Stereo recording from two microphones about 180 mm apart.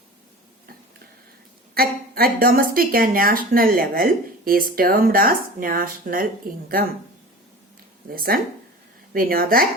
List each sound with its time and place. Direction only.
1.7 s speech: 55° right (ahead or behind)
8.1 s speech: 55° right (ahead or behind)